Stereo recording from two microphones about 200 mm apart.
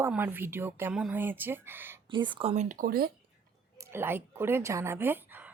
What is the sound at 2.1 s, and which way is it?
Speech, 25° right (ahead or behind).